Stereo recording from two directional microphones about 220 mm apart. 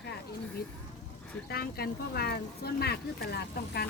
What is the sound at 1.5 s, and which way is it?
Speech, 45° left (ahead or behind).